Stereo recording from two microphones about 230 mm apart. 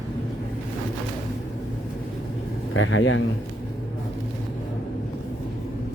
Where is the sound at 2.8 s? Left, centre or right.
Left.